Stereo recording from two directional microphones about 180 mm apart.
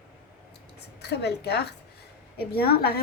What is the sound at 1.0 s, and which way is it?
A woman's voice, 65° left (ahead or behind).